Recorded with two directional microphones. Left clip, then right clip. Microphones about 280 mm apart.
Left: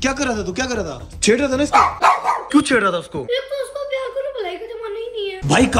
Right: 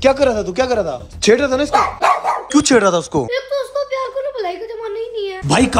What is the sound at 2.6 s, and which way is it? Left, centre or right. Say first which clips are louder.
Speech: right 4 dB; centre.